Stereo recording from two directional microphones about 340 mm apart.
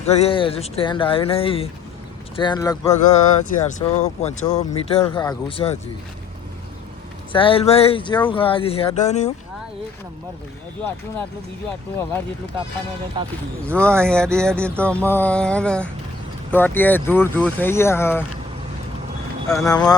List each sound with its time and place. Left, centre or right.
0.0 s speech: centre
3.1 s speech: left
7.3 s speech: centre
13.2 s speech: centre
13.7 s speech: centre
19.5 s speech: centre